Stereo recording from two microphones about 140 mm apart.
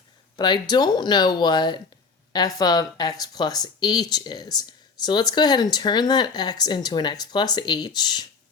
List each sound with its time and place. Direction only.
0.3 s speech: 30° left (ahead or behind)